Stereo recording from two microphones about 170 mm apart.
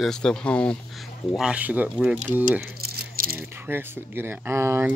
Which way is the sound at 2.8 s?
60° right (ahead or behind).